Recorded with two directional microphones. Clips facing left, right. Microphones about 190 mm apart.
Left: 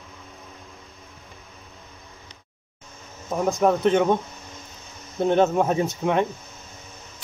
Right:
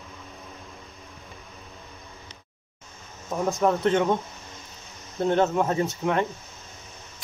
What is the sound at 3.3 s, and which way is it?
Speech, 15° left (ahead or behind).